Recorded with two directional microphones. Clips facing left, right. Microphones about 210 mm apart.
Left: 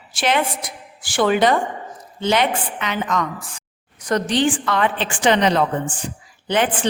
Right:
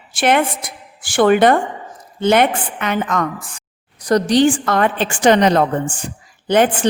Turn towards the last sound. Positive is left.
turn(degrees=-45)  # may be behind; listen again after turning